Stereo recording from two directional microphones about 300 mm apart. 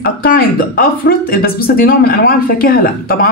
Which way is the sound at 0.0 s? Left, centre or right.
Left.